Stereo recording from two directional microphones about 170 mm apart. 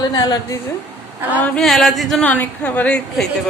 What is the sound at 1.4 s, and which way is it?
Speech, centre (ahead or behind).